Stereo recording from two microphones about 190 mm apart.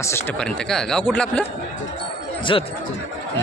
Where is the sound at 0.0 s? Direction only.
15° left (ahead or behind).